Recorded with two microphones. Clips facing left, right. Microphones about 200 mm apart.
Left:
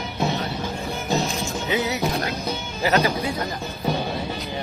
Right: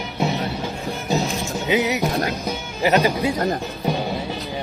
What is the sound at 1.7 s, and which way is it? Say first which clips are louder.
Music: right 4 dB; 15° right (ahead or behind).